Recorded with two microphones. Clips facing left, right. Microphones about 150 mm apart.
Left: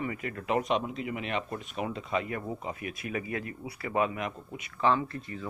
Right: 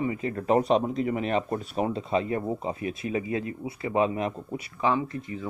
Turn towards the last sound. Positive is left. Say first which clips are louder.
# right 1 dB
turn(degrees=-15)  # may be behind; listen again after turning